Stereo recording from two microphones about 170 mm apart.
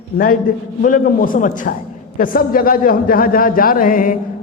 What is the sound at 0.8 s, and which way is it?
A woman's voice, 50° left (ahead or behind).